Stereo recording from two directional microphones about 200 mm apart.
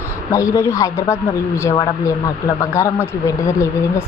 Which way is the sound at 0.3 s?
15° left (ahead or behind).